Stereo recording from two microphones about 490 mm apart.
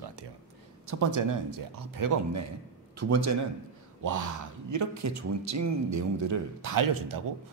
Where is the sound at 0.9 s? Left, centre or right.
Right.